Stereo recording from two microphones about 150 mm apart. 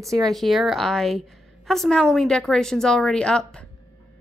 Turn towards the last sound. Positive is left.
turn(degrees=5)  # may be behind; listen again after turning